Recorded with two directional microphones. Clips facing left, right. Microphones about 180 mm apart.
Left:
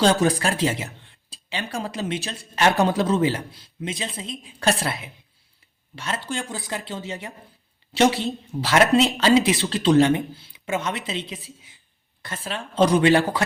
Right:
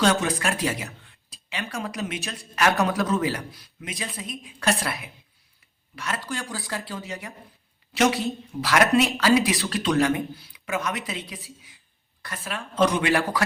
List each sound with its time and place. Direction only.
0.0 s speech: 35° left (ahead or behind)